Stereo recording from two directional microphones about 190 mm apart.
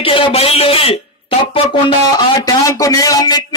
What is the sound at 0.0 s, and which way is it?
Speech, 30° left (ahead or behind).